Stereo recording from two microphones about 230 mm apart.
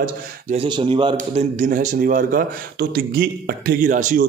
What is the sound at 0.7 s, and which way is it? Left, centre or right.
A man's voice, centre.